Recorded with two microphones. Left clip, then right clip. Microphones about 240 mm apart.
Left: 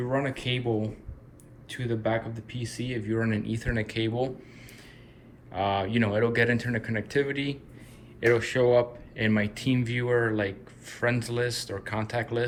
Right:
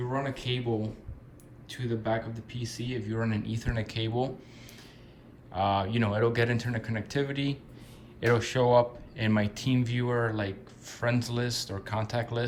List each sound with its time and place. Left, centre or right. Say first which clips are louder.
0.2 s speech: left 3 dB; centre
5.5 s speech: left 1 dB; right